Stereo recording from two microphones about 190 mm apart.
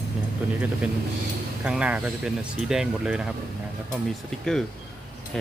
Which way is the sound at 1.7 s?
5° right (ahead or behind).